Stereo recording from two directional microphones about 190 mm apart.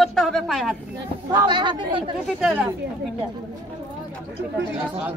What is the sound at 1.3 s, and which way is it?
Speech, 25° right (ahead or behind).